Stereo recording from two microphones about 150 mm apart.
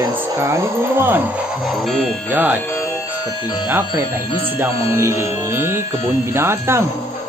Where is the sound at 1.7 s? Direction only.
5° left (ahead or behind).